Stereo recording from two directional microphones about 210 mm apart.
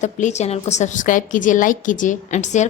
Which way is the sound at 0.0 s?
35° left (ahead or behind).